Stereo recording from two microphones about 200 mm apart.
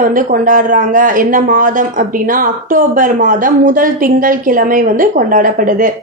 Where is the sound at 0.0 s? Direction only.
45° right (ahead or behind).